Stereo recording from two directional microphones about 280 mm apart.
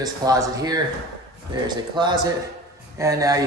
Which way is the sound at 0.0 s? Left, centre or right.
Centre.